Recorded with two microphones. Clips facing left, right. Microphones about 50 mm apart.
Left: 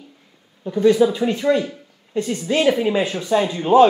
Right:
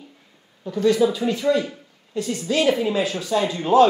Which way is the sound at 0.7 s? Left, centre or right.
Left.